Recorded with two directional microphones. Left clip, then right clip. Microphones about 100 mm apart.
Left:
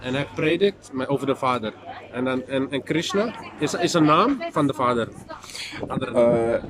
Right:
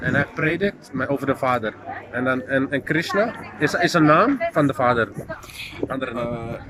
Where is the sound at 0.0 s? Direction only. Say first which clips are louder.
Right 3 dB; 35° left (ahead or behind).